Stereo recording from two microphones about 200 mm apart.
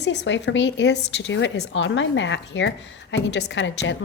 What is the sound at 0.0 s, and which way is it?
Speech, 65° left (ahead or behind).